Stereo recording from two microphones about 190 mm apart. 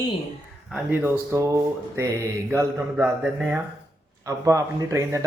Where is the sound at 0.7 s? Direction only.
10° right (ahead or behind).